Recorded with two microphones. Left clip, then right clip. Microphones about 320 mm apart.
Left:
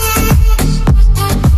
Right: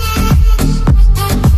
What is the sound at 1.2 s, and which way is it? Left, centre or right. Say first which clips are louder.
Music: even; centre.